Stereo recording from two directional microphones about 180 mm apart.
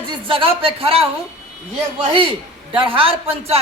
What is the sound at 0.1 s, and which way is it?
Speech, 30° right (ahead or behind).